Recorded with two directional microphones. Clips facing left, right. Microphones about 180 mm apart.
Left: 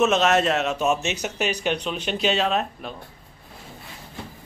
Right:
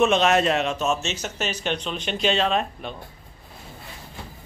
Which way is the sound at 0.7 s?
15° left (ahead or behind).